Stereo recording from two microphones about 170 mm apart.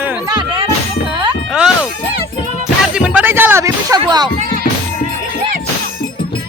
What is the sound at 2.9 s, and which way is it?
Music, 5° right (ahead or behind).